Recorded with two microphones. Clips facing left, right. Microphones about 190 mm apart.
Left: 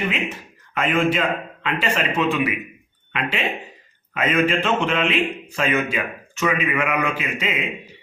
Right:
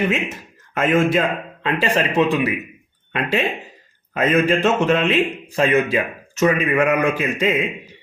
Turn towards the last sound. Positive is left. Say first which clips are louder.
# right 7 dB
turn(degrees=-45)  # may be behind; listen again after turning